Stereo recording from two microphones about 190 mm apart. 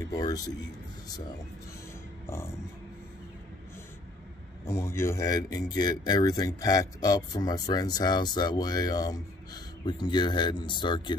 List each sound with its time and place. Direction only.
0.1 s speech: 20° left (ahead or behind)
2.2 s speech: 15° left (ahead or behind)
4.6 s speech: 15° left (ahead or behind)